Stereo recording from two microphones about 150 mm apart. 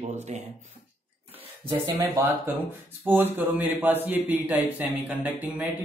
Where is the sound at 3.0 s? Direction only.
15° right (ahead or behind).